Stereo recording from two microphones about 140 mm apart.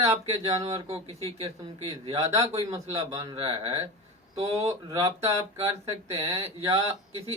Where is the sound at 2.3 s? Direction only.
25° right (ahead or behind).